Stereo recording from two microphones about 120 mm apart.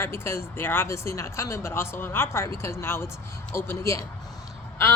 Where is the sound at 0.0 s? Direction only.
20° left (ahead or behind).